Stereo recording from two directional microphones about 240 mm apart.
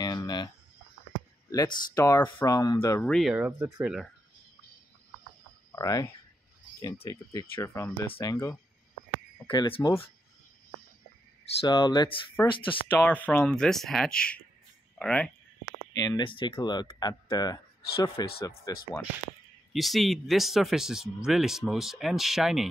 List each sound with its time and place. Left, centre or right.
0.0 s a sound: centre
1.5 s speech: centre
5.8 s speech: centre
11.6 s speech: centre
13.0 s speech: centre
15.9 s speech: centre
19.7 s speech: centre